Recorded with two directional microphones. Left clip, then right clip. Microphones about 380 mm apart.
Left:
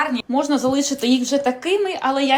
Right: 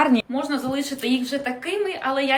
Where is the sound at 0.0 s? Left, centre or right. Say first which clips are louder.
Right 3 dB; centre.